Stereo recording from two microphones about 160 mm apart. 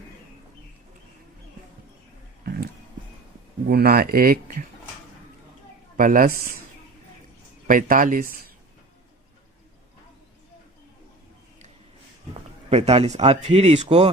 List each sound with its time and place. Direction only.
2.4 s music: 70° right (ahead or behind)
3.7 s speech: 75° right (ahead or behind)
6.0 s speech: 60° right (ahead or behind)
7.7 s speech: 60° right (ahead or behind)
12.3 s speech: 40° right (ahead or behind)